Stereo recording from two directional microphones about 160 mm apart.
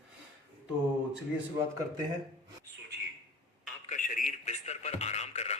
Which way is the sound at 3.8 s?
55° left (ahead or behind).